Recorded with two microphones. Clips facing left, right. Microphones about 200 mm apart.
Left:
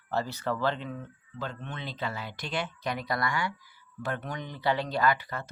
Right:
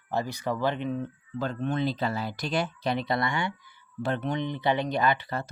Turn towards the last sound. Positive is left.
turn(degrees=-30)  # may be behind; listen again after turning